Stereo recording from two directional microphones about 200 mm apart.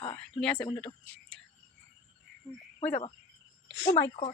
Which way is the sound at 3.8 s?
40° left (ahead or behind).